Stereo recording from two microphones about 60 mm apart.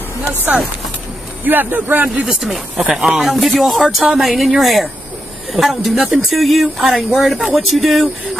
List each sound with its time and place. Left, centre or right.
1.4 s speech: right
2.2 s speech: centre